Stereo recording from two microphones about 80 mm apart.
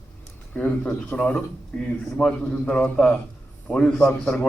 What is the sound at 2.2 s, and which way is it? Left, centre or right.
A man's voice, centre.